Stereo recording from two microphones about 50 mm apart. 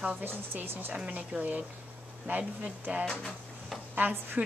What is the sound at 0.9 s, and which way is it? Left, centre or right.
A woman's voice, right.